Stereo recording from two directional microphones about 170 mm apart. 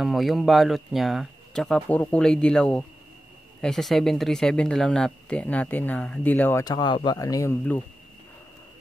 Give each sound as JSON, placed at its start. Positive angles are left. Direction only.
{"t": 0.0, "sound": "speech", "side_deg": 0}
{"t": 6.6, "sound": "speech", "side_deg": 25}